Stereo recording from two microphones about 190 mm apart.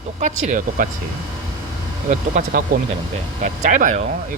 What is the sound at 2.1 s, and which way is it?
Speech, 40° right (ahead or behind).